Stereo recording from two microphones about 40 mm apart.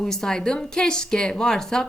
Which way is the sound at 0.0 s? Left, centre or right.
Centre.